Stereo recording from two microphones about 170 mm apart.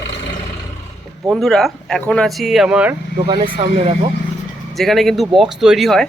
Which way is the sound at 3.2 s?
30° right (ahead or behind).